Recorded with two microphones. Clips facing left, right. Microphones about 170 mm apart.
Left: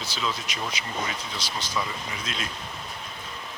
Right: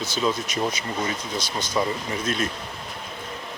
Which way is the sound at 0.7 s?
45° right (ahead or behind).